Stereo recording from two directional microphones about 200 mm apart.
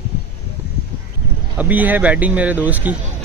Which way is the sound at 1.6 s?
10° right (ahead or behind).